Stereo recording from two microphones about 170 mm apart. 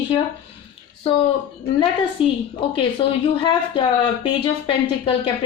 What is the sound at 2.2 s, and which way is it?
Speech, 35° left (ahead or behind).